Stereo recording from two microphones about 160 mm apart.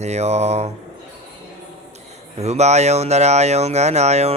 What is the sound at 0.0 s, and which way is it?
Speech, 45° right (ahead or behind).